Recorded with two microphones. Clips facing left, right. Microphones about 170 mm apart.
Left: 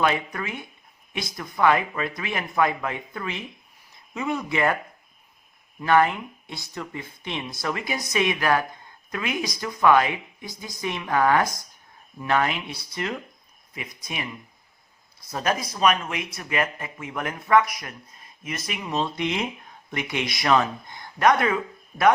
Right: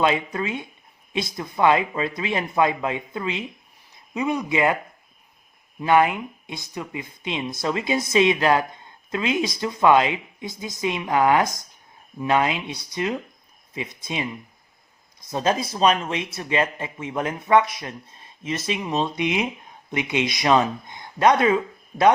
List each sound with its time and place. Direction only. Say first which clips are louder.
0.0 s speech: right 3 dB; 20° right (ahead or behind)
5.8 s speech: right 2 dB; 15° right (ahead or behind)